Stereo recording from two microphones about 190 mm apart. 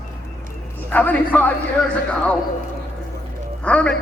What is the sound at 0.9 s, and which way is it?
Speech, 10° left (ahead or behind).